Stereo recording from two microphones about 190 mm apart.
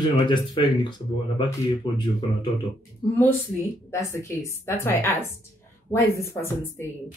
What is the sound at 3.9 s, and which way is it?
Speech, 15° left (ahead or behind).